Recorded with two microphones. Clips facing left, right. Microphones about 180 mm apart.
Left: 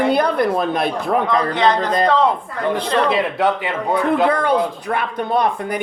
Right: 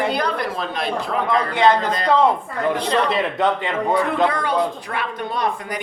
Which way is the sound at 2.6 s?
5° left (ahead or behind).